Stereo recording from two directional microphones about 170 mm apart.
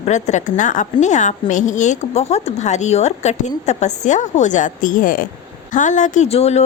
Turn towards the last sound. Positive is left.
turn(degrees=40)  # may be behind; listen again after turning